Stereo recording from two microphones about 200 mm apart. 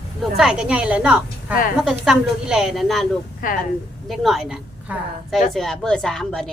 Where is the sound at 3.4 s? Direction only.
40° left (ahead or behind).